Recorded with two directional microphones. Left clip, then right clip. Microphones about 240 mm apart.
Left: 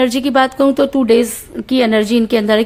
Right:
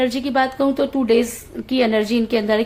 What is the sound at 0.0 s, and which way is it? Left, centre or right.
Speech, left.